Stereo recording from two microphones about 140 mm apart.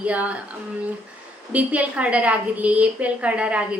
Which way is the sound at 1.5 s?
10° right (ahead or behind).